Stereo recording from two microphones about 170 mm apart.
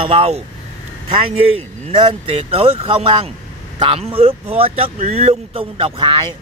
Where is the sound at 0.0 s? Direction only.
35° right (ahead or behind).